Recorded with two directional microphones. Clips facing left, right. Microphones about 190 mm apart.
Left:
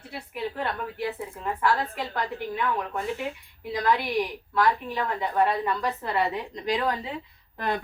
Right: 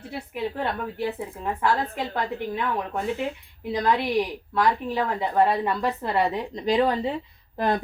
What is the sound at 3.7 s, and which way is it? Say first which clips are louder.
A woman's voice: right 2 dB; 25° right (ahead or behind).